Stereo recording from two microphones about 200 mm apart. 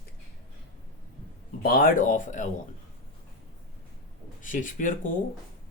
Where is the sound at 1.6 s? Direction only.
45° left (ahead or behind).